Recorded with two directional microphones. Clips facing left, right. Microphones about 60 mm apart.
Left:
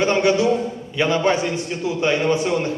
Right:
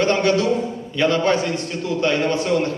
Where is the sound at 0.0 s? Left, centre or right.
Centre.